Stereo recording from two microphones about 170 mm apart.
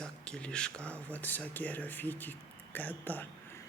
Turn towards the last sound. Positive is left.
turn(degrees=10)  # may be behind; listen again after turning